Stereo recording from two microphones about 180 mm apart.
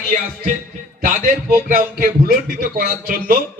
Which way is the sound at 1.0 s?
45° right (ahead or behind).